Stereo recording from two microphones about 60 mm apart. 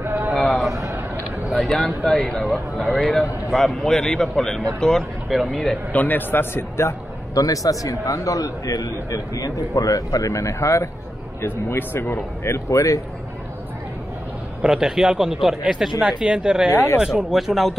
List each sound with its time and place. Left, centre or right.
0.0 s a sound: right
1.5 s a sound: centre
2.0 s a man's voice: centre
5.9 s a man's voice: left
7.3 s a man's voice: left
11.4 s speech: left
14.6 s speech: centre